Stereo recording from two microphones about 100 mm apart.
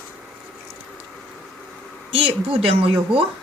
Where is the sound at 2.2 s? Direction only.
65° right (ahead or behind).